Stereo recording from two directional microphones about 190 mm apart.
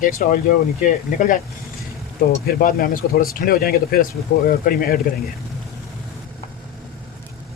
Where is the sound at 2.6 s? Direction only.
50° left (ahead or behind).